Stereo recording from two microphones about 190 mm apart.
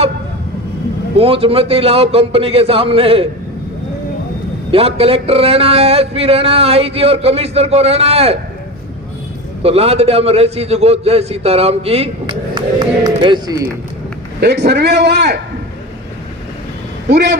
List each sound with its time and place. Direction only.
1.1 s a man's voice: 30° right (ahead or behind)
4.7 s a man's voice: 30° right (ahead or behind)
9.6 s a man's voice: 30° right (ahead or behind)
14.4 s a man's voice: 60° right (ahead or behind)
17.1 s a man's voice: 65° right (ahead or behind)